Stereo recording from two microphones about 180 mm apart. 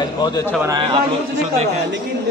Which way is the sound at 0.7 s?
25° right (ahead or behind).